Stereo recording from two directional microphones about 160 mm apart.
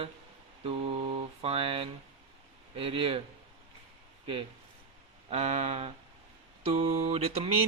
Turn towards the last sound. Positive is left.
turn(degrees=-35)  # may be behind; listen again after turning